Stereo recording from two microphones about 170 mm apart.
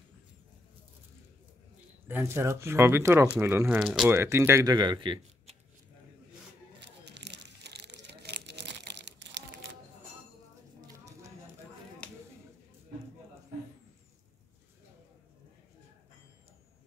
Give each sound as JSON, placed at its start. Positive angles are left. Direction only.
{"t": 2.0, "sound": "speech", "side_deg": -10}
{"t": 4.1, "sound": "speech", "side_deg": -15}
{"t": 6.8, "sound": "a sound", "side_deg": -90}